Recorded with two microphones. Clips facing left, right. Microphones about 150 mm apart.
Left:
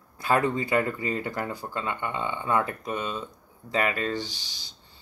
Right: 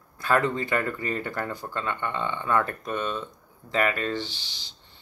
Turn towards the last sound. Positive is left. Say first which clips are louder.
# even
turn(degrees=10)  # may be behind; listen again after turning